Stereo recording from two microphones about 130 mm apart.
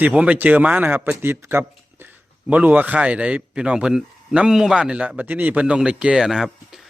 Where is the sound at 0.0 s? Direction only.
10° right (ahead or behind).